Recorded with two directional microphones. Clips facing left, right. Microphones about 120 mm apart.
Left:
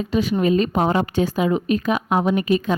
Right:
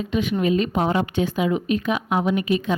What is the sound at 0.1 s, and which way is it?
A woman's voice, 35° left (ahead or behind).